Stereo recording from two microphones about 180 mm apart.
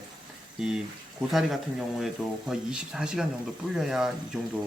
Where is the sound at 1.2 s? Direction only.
Centre (ahead or behind).